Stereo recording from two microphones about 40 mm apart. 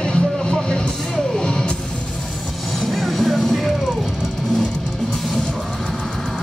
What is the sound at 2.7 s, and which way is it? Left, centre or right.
Music, centre.